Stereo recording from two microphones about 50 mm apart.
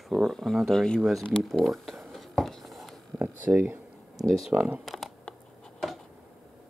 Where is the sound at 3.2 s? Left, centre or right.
Right.